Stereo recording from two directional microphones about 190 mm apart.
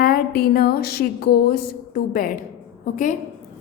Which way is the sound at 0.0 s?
50° left (ahead or behind).